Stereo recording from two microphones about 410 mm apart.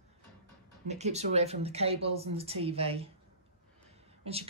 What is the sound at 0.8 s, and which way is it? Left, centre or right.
A woman's voice, centre.